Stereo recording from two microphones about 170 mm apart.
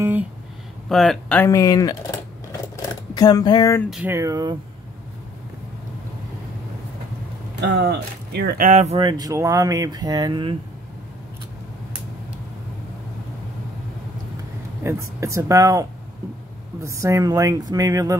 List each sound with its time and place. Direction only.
0.0 s a sound: 10° right (ahead or behind)
0.8 s speech: centre (ahead or behind)
1.5 s speech: 20° left (ahead or behind)
3.9 s speech: 10° right (ahead or behind)
7.6 s speech: 85° right
8.6 s speech: 45° right (ahead or behind)
8.9 s speech: 25° right (ahead or behind)
14.8 s speech: 15° right (ahead or behind)